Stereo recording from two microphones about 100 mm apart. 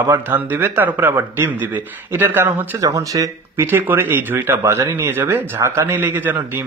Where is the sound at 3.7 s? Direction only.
20° right (ahead or behind).